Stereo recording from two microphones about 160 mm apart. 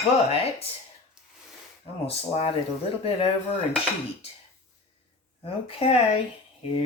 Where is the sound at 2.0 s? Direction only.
40° left (ahead or behind).